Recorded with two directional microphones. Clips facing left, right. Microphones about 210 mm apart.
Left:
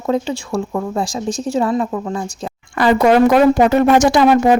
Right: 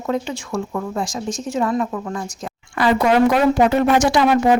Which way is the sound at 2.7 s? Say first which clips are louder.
Left 4 dB; 45° left (ahead or behind).